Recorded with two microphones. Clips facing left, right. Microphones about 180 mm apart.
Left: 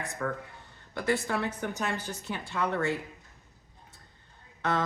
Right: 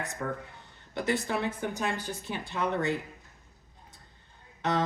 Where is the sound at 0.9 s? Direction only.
20° right (ahead or behind).